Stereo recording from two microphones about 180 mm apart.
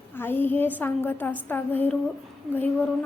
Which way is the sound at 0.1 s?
10° left (ahead or behind).